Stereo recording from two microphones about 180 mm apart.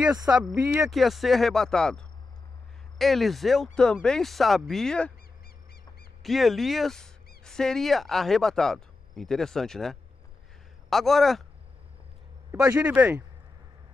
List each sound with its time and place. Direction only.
0.6 s speech: 15° right (ahead or behind)
0.8 s speech: centre (ahead or behind)
6.2 s speech: centre (ahead or behind)
12.6 s speech: 10° right (ahead or behind)